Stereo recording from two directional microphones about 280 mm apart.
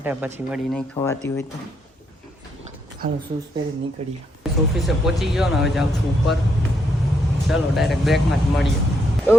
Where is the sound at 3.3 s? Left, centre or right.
Centre.